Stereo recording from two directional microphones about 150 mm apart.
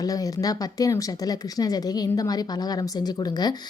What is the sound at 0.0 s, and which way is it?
A woman's voice, 25° left (ahead or behind).